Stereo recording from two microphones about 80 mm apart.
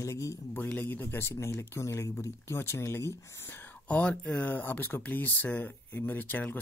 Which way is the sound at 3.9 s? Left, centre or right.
Centre.